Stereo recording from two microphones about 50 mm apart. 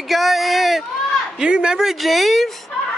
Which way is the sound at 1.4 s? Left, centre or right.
Centre.